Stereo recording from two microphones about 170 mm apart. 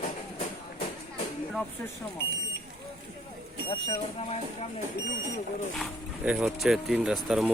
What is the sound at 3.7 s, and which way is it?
Speech, 35° left (ahead or behind).